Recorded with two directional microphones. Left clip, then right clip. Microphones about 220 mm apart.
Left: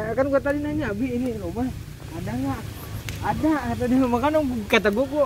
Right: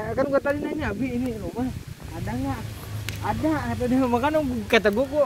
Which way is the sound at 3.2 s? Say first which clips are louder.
Left 2 dB; 10° left (ahead or behind).